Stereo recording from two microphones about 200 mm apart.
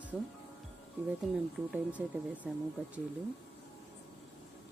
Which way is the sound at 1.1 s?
5° right (ahead or behind).